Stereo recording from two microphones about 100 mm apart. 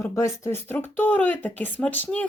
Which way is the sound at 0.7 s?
20° left (ahead or behind).